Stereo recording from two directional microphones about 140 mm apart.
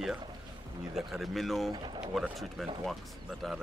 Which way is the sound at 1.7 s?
35° right (ahead or behind).